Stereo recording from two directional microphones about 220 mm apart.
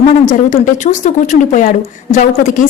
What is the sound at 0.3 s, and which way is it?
Speech, 35° left (ahead or behind).